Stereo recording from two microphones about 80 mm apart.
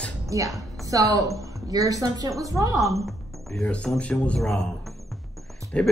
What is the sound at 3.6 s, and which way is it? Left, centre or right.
Speech, centre.